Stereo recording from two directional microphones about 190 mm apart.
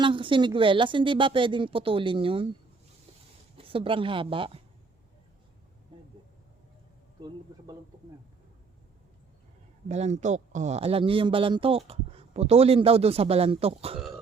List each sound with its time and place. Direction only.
0.0 s a woman's voice: 25° right (ahead or behind)
3.6 s a woman's voice: 30° right (ahead or behind)
5.9 s a sound: 25° right (ahead or behind)
9.9 s speech: 35° right (ahead or behind)